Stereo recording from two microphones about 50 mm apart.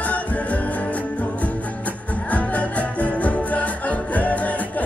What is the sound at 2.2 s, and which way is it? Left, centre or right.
Music, left.